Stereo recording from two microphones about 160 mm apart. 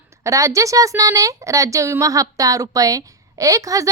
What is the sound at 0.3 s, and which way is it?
A woman's voice, 20° right (ahead or behind).